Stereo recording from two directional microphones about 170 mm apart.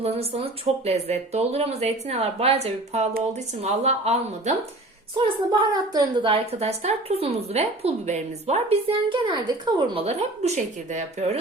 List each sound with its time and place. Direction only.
0.0 s a woman's voice: 35° right (ahead or behind)
5.1 s a woman's voice: 30° right (ahead or behind)